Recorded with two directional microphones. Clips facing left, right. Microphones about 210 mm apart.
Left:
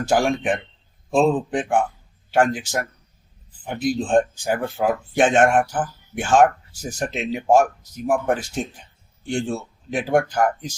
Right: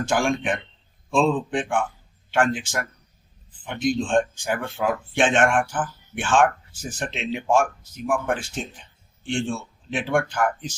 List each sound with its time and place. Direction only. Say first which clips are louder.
0.0 s speech: left 3 dB; 40° left (ahead or behind)